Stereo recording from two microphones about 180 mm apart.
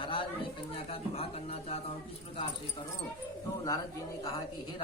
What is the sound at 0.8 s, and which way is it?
Speech, 35° left (ahead or behind).